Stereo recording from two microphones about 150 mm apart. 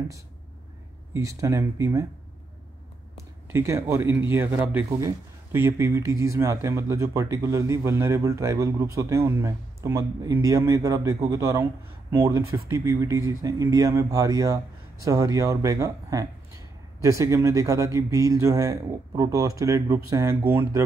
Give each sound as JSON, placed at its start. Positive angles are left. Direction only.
{"t": 1.1, "sound": "speech", "side_deg": -20}
{"t": 3.4, "sound": "speech", "side_deg": -15}